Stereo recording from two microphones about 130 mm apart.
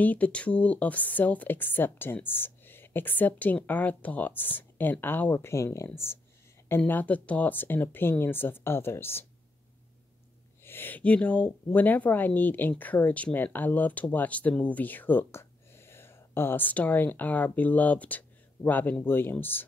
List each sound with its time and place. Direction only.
0.0 s speech: 10° left (ahead or behind)
10.6 s speech: 15° left (ahead or behind)